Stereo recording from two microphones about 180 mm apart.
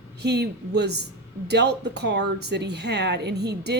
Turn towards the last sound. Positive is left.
turn(degrees=-65)  # may be behind; listen again after turning